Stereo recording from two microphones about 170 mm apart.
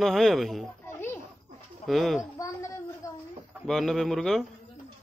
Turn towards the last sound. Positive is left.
turn(degrees=0)  # may be behind; listen again after turning